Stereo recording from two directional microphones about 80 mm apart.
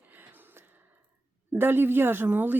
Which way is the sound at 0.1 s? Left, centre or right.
Right.